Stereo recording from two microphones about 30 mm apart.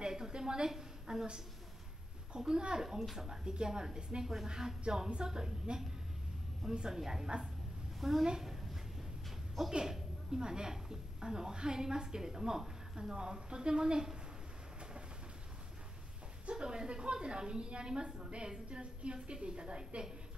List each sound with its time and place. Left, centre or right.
0.0 s a sound: centre
0.7 s a woman's voice: centre
2.3 s a woman's voice: right
8.0 s a woman's voice: centre
9.7 s a woman's voice: right
16.4 s a woman's voice: right